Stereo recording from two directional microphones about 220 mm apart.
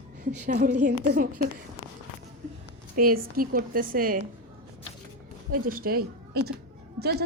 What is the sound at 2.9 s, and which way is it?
A woman's voice, 40° right (ahead or behind).